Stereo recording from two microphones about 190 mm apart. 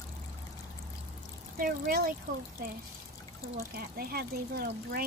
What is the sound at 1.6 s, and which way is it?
Speech, 50° right (ahead or behind).